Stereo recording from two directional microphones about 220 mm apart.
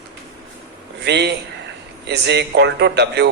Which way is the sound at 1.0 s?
50° right (ahead or behind).